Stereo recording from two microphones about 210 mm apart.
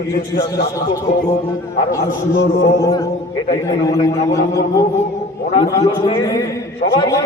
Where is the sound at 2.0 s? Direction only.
40° left (ahead or behind).